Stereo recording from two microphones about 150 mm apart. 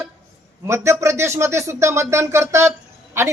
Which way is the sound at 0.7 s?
20° right (ahead or behind).